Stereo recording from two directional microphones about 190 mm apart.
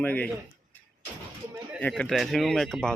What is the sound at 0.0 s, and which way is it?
Speech, 10° left (ahead or behind).